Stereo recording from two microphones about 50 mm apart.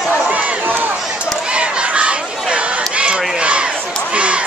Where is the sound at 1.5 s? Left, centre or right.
Right.